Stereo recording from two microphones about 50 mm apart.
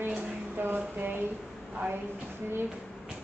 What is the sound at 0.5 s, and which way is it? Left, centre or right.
Speech, right.